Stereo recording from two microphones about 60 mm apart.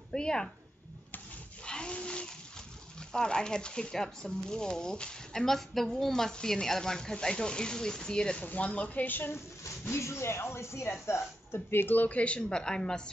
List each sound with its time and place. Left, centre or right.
0.1 s speech: centre
1.6 s a sound: centre
3.1 s speech: centre
8.4 s a woman's voice: left
9.3 s speech: left; by 13.0 s centre